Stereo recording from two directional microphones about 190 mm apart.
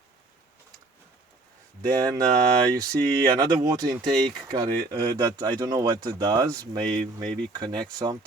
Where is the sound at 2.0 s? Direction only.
20° right (ahead or behind).